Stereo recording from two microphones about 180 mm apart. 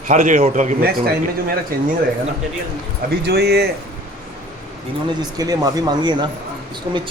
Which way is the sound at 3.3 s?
65° right (ahead or behind).